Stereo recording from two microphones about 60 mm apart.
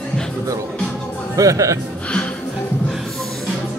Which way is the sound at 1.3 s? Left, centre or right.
Right.